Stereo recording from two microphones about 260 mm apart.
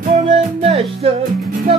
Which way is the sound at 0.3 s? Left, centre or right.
Right.